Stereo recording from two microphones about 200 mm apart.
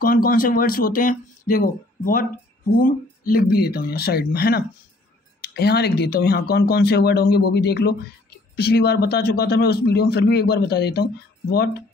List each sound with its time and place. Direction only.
0.0 s speech: 45° left (ahead or behind)